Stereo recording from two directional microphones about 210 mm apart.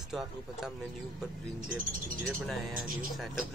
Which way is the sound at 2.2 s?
Centre (ahead or behind).